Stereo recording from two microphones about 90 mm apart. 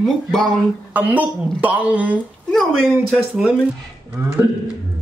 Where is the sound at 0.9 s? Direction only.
15° right (ahead or behind).